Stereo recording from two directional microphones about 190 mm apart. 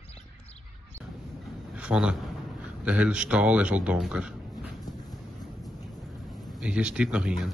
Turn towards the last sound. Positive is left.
turn(degrees=-5)  # may be behind; listen again after turning